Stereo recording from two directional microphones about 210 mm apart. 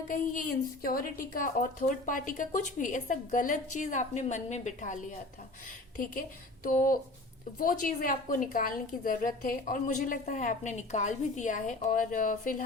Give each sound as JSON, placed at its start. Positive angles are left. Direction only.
{"t": 0.1, "sound": "a woman's voice", "side_deg": 40}
{"t": 6.0, "sound": "a woman's voice", "side_deg": 40}